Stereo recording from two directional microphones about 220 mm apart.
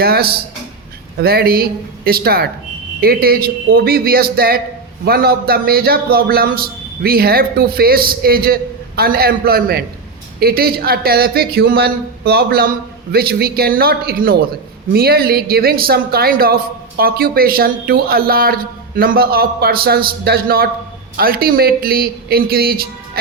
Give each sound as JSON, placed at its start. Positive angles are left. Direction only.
{"t": 0.0, "sound": "a man's voice", "side_deg": -45}